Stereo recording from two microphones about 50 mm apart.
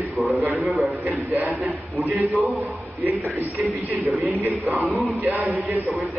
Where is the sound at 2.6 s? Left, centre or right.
Right.